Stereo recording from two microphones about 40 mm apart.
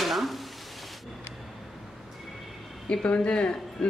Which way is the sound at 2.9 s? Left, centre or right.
Left.